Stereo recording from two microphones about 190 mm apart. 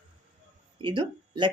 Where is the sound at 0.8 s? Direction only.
25° right (ahead or behind).